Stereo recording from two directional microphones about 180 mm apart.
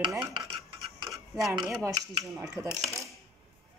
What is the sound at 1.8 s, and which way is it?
Speech, 15° right (ahead or behind).